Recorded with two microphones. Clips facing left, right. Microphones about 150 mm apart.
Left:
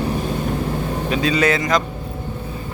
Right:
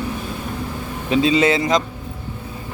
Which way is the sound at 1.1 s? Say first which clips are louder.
Right 3 dB; 25° right (ahead or behind).